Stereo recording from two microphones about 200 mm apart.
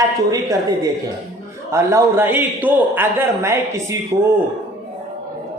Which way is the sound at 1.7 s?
15° right (ahead or behind).